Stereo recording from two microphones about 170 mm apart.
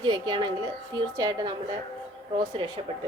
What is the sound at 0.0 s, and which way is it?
A woman's voice, 25° right (ahead or behind).